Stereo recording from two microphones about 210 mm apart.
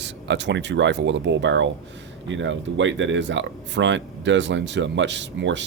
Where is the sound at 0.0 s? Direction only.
55° right (ahead or behind).